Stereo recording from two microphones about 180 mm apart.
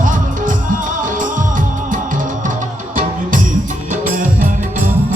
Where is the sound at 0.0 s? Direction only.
45° right (ahead or behind).